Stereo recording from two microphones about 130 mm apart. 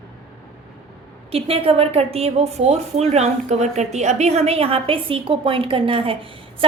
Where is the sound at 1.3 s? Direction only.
45° right (ahead or behind).